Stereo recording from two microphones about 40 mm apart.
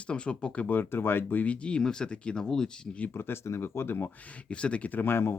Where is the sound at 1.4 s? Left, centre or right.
Left.